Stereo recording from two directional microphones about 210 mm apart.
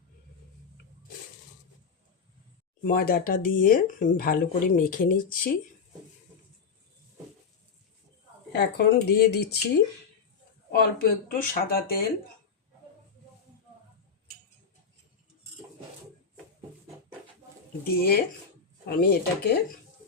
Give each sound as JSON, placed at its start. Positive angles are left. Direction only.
{"t": 2.8, "sound": "speech", "side_deg": 45}
{"t": 8.5, "sound": "speech", "side_deg": 50}
{"t": 10.7, "sound": "speech", "side_deg": 45}
{"t": 17.8, "sound": "speech", "side_deg": 45}